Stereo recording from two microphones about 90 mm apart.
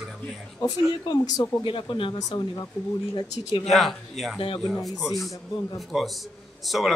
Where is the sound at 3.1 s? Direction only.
60° left (ahead or behind).